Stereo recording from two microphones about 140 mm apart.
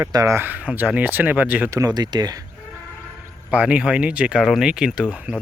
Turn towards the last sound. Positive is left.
turn(degrees=-10)  # may be behind; listen again after turning